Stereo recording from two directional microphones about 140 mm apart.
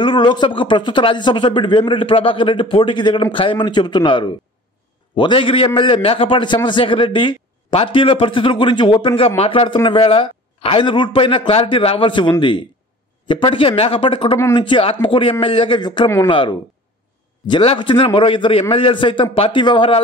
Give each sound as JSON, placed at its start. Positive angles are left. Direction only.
{"t": 0.0, "sound": "speech", "side_deg": 35}